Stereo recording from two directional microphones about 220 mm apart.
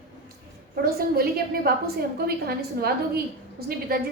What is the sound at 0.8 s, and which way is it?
Speech, 45° right (ahead or behind).